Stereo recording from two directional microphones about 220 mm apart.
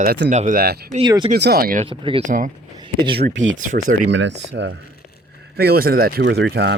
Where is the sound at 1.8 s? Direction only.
25° right (ahead or behind).